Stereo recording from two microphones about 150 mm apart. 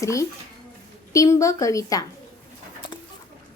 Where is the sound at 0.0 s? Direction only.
20° left (ahead or behind).